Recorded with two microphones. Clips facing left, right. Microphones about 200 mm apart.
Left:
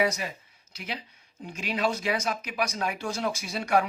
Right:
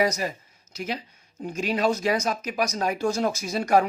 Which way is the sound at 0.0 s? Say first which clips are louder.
Right 3 dB; 40° right (ahead or behind).